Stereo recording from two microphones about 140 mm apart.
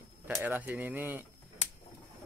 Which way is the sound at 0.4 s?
15° right (ahead or behind).